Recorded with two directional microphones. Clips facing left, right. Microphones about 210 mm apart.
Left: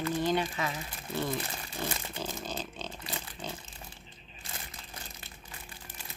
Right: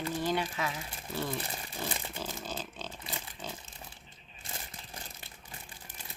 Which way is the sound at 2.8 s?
5° right (ahead or behind).